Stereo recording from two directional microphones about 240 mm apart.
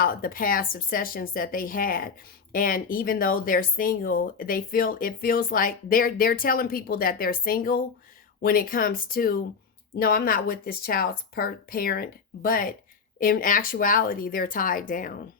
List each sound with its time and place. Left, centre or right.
0.0 s speech: left